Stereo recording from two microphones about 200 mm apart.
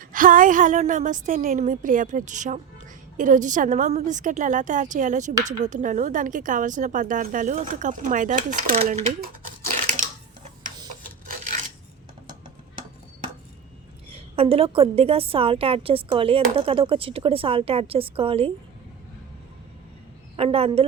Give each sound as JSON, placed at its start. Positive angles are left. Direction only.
{"t": 0.0, "sound": "a woman's voice", "side_deg": -45}
{"t": 9.2, "sound": "a sound", "side_deg": -40}
{"t": 14.1, "sound": "a woman's voice", "side_deg": -30}
{"t": 20.3, "sound": "a woman's voice", "side_deg": -30}